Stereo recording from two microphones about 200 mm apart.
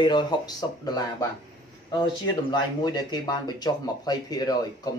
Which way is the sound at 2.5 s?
20° left (ahead or behind).